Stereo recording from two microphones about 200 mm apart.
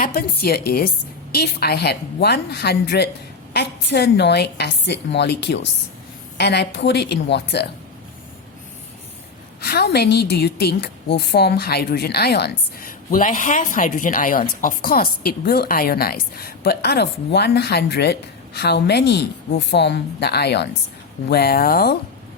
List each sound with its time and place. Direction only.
0.0 s a woman's voice: 50° left (ahead or behind)
9.6 s a woman's voice: 50° left (ahead or behind)
13.1 s a woman's voice: 40° left (ahead or behind)